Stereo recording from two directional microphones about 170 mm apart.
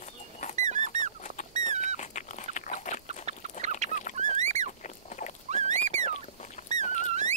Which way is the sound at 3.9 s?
45° left (ahead or behind).